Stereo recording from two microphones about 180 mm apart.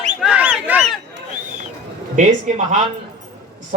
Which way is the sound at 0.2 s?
5° right (ahead or behind).